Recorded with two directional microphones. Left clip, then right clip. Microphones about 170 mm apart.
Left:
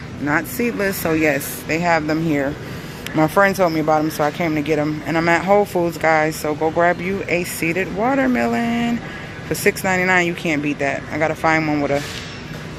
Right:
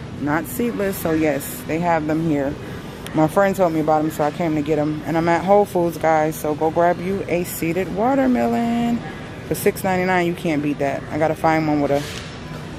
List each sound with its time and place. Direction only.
0.3 s speech: 5° right (ahead or behind)
3.8 s speech: centre (ahead or behind)
7.0 s speech: 15° right (ahead or behind)